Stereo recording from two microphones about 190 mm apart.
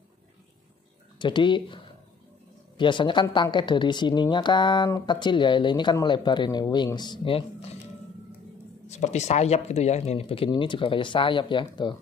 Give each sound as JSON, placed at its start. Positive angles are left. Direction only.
{"t": 1.2, "sound": "a woman's voice", "side_deg": 25}
{"t": 2.8, "sound": "a woman's voice", "side_deg": 25}
{"t": 8.8, "sound": "a woman's voice", "side_deg": 35}